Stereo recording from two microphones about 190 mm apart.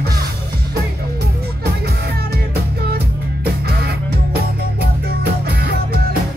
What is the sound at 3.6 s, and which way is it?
Music, 55° right (ahead or behind).